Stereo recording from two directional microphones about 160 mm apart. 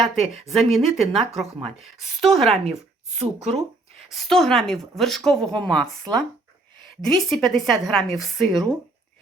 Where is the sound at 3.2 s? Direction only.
45° right (ahead or behind).